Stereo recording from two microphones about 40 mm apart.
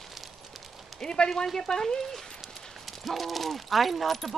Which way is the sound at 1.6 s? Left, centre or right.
Centre.